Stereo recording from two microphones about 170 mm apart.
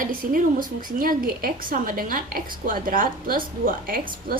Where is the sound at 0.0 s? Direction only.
55° right (ahead or behind).